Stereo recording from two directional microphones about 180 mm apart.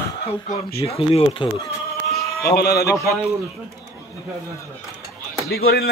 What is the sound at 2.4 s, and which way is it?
Speech, 60° left (ahead or behind).